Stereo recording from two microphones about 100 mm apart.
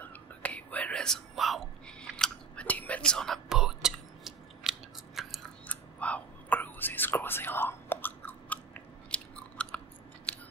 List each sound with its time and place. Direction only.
0.0 s whispering: 15° left (ahead or behind); by 5.5 s centre (ahead or behind)
5.7 s whispering: 15° left (ahead or behind)